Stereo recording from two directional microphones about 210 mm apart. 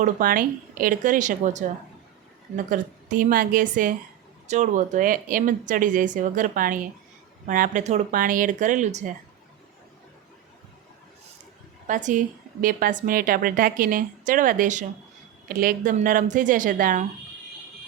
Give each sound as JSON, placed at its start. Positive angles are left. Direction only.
{"t": 0.0, "sound": "speech", "side_deg": -40}
{"t": 11.9, "sound": "speech", "side_deg": -35}